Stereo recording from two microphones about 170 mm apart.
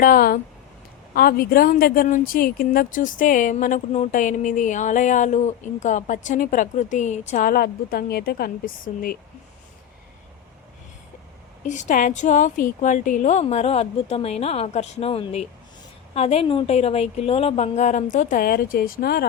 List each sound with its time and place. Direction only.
0.0 s a woman's voice: 60° left (ahead or behind)
11.7 s a woman's voice: 45° left (ahead or behind); by 19.2 s 60° left (ahead or behind)